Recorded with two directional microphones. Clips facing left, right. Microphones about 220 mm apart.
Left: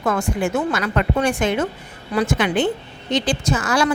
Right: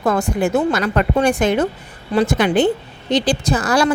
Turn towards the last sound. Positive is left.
turn(degrees=-35)  # may be behind; listen again after turning